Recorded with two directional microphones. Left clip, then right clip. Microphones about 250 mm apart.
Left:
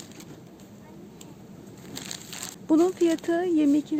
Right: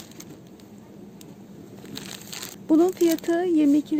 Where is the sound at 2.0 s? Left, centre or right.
Centre.